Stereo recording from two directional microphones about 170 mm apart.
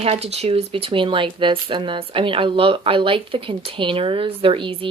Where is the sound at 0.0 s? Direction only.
40° right (ahead or behind).